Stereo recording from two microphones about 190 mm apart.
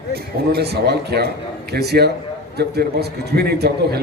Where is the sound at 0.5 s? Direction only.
60° right (ahead or behind).